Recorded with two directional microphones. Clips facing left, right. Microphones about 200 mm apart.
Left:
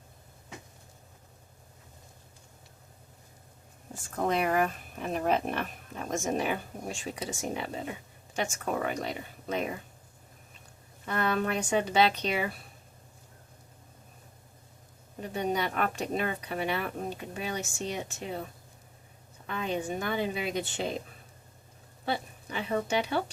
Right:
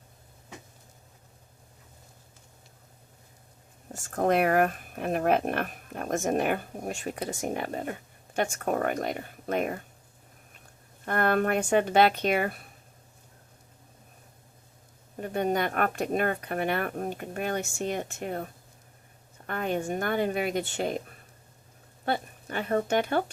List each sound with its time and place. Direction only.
4.1 s speech: 50° right (ahead or behind)
11.0 s speech: 55° right (ahead or behind)
15.2 s speech: 50° right (ahead or behind)
19.5 s speech: 55° right (ahead or behind)
22.0 s speech: 55° right (ahead or behind)